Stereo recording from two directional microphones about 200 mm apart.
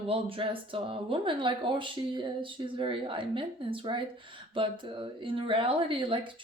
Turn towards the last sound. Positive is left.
turn(degrees=-25)  # may be behind; listen again after turning